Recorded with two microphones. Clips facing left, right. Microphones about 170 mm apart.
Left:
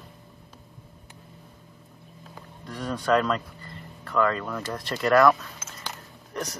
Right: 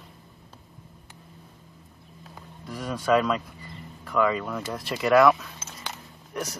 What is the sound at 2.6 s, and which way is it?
Speech, 5° right (ahead or behind).